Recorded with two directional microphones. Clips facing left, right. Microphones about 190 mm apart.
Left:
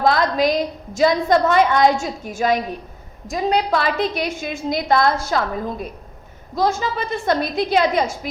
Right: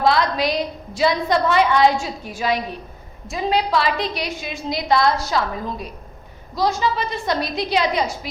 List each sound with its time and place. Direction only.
0.0 s a woman's voice: 45° left (ahead or behind)